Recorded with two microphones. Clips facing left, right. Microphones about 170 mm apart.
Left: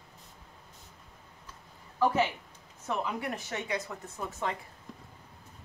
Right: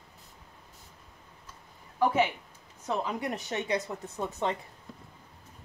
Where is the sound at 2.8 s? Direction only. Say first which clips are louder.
Right 2 dB; 20° right (ahead or behind).